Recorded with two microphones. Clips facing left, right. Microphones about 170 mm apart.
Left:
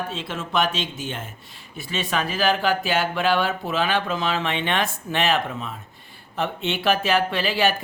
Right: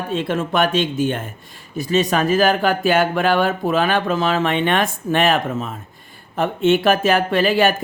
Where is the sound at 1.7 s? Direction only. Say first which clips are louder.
Right 8 dB; 40° right (ahead or behind).